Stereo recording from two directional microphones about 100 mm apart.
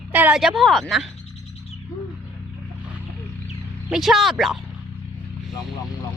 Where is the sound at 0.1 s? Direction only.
20° right (ahead or behind).